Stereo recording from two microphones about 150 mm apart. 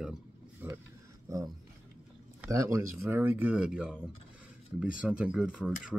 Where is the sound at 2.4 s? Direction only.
20° right (ahead or behind).